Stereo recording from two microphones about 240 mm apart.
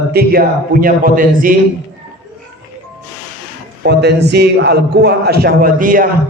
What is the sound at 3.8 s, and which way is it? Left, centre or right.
A man's voice, right.